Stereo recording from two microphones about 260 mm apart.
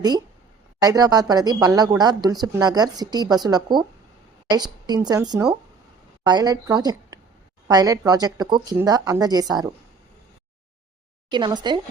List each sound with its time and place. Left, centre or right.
0.8 s a woman's voice: centre
11.3 s a woman's voice: centre